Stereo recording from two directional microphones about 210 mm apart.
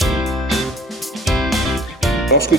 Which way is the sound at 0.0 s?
Centre (ahead or behind).